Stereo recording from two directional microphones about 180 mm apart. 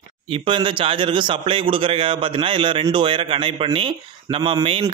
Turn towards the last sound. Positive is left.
turn(degrees=-25)  # may be behind; listen again after turning